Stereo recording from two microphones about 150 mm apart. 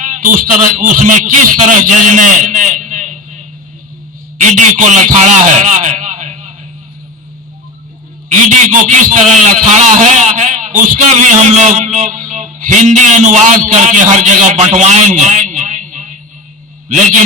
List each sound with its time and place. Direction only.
0.0 s a man's voice: 60° right (ahead or behind)
1.9 s a sound: 60° right (ahead or behind)
4.4 s a man's voice: 55° right (ahead or behind)
8.3 s a man's voice: 55° right (ahead or behind)